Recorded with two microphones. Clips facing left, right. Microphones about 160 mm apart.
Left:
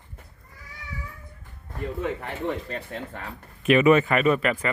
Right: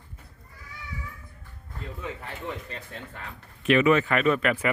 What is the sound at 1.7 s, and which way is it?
Speech, 60° left (ahead or behind).